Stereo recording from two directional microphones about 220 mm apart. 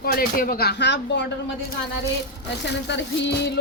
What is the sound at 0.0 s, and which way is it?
Speech, 40° left (ahead or behind).